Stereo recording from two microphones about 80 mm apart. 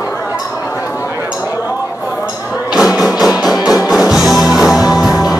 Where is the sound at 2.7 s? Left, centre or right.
Centre.